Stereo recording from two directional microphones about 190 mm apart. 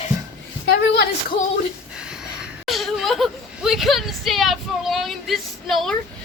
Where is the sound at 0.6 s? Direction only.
60° left (ahead or behind).